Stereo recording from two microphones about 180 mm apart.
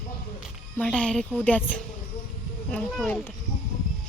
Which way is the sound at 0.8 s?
5° left (ahead or behind).